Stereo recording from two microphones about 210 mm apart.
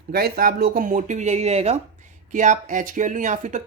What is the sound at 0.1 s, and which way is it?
Speech, 45° right (ahead or behind).